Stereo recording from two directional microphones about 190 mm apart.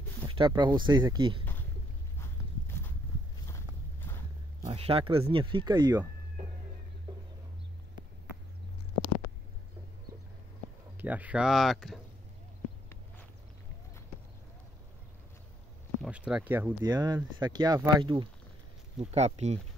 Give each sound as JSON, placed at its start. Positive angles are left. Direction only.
{"t": 0.3, "sound": "speech", "side_deg": -25}
{"t": 2.1, "sound": "walk", "side_deg": 10}
{"t": 4.6, "sound": "speech", "side_deg": -30}
{"t": 11.0, "sound": "speech", "side_deg": -10}
{"t": 16.0, "sound": "speech", "side_deg": -5}
{"t": 16.8, "sound": "speech", "side_deg": -20}